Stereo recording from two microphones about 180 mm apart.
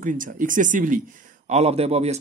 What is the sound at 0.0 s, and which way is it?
Speech, 50° right (ahead or behind).